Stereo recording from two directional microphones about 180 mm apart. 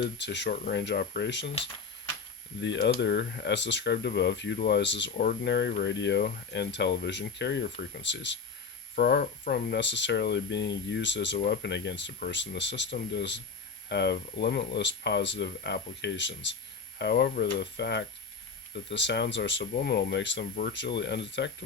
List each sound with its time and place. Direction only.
0.2 s speech: 70° left (ahead or behind)
2.6 s speech: 80° left
9.0 s speech: 60° left (ahead or behind); by 11.3 s 80° left
11.3 s speech: 65° left (ahead or behind); by 16.6 s 85° left
17.0 s speech: 70° left (ahead or behind)
19.7 s speech: 65° left (ahead or behind)